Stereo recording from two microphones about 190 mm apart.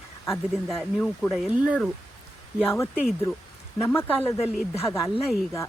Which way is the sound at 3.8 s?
15° left (ahead or behind).